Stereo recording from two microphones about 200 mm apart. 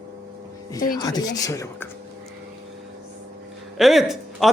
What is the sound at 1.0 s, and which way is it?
Speech, 20° left (ahead or behind).